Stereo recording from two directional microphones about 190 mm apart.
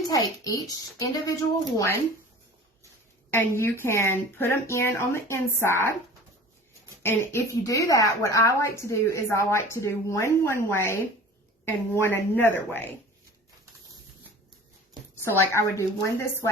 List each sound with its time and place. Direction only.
0.1 s a woman's voice: 20° left (ahead or behind)
3.3 s a woman's voice: 10° left (ahead or behind)
7.0 s a woman's voice: 15° left (ahead or behind)
15.2 s a woman's voice: 15° left (ahead or behind)